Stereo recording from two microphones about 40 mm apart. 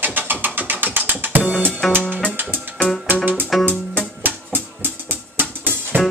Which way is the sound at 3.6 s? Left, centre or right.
Right.